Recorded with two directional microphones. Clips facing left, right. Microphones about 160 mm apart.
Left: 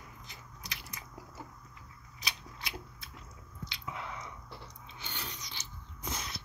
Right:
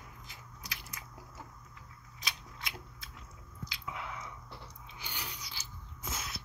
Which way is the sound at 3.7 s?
5° right (ahead or behind).